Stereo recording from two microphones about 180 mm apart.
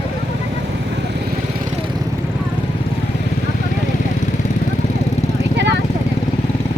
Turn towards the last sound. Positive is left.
turn(degrees=-70)  # may be behind; listen again after turning